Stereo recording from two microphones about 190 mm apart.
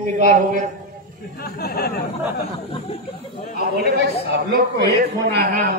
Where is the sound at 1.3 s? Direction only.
55° left (ahead or behind).